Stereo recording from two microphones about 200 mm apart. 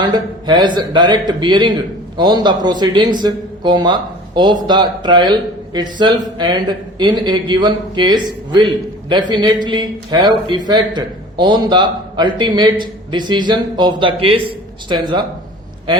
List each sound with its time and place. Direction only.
0.0 s a man's voice: 20° right (ahead or behind)